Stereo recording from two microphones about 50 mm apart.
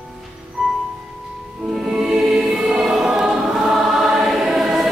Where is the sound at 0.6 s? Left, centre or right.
Centre.